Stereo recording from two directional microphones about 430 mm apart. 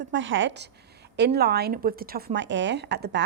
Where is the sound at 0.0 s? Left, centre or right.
Right.